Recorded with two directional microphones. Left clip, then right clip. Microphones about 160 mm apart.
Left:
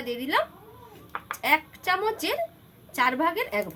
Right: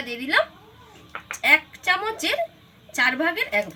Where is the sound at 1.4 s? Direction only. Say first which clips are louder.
Right 6 dB; 15° left (ahead or behind).